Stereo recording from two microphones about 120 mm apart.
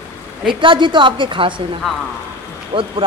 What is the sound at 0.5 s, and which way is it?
Speech, 40° right (ahead or behind).